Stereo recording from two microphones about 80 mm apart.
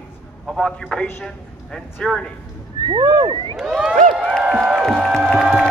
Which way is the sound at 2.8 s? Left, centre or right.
Right.